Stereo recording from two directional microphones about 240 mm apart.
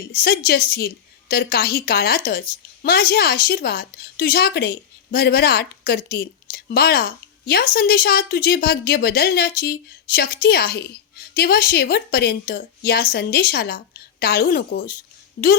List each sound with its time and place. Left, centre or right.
0.1 s a woman's voice: left